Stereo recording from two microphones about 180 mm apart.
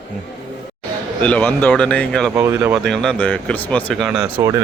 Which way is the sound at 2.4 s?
15° right (ahead or behind).